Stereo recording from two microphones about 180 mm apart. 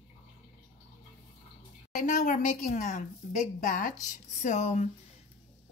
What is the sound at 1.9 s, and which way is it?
A woman's voice, 45° left (ahead or behind).